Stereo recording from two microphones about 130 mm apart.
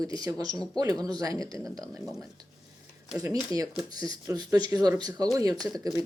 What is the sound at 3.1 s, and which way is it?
A woman's voice, 25° right (ahead or behind).